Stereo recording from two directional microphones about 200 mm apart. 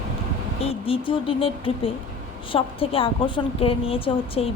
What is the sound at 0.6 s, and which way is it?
A woman's voice, 25° left (ahead or behind).